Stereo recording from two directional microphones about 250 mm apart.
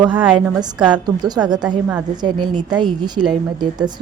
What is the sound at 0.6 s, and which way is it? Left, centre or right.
A woman's voice, centre.